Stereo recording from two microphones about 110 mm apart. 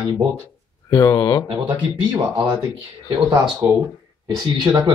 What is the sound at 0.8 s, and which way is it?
Speech, 35° left (ahead or behind).